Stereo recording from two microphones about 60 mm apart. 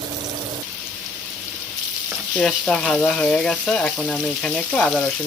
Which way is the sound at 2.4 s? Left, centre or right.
Centre.